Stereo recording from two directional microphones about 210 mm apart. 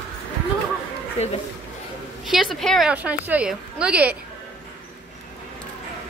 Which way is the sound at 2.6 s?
Centre (ahead or behind).